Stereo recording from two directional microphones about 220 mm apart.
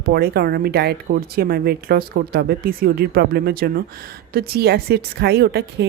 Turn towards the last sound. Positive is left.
turn(degrees=-45)  # may be behind; listen again after turning